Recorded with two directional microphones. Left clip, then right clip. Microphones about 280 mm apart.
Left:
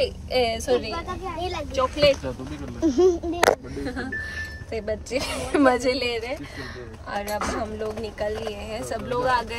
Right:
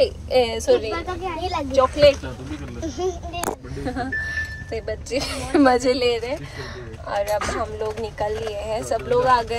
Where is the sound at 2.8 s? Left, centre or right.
Left.